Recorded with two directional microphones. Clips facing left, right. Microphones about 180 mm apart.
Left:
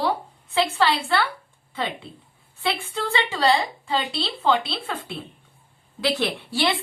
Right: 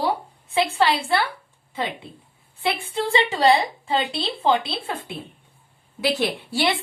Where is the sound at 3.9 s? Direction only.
20° right (ahead or behind).